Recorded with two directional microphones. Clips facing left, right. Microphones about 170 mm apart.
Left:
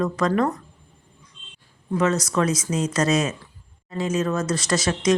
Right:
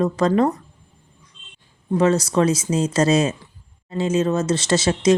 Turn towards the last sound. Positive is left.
turn(degrees=-25)  # may be behind; listen again after turning